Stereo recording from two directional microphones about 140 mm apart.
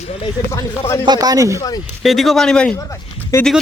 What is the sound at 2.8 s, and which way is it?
Speech, 20° left (ahead or behind).